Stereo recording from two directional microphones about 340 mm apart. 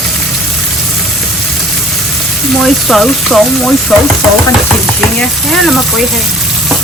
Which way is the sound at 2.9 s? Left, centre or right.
Centre.